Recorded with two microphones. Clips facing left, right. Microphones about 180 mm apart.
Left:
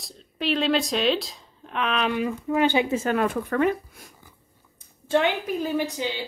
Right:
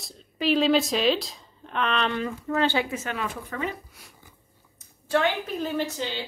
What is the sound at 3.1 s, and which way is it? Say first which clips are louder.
Speech: left 9 dB; 55° left (ahead or behind).